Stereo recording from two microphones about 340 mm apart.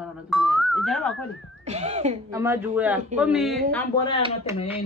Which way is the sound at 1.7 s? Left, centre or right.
Centre.